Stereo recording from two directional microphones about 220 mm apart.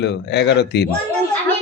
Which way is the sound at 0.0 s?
50° left (ahead or behind).